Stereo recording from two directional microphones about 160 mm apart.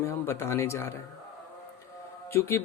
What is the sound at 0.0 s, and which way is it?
Speech, 15° left (ahead or behind).